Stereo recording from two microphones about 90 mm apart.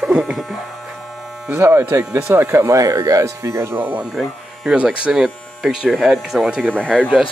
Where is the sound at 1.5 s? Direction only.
30° right (ahead or behind).